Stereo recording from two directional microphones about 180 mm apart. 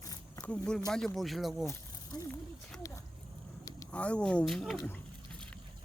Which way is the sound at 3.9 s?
5° left (ahead or behind).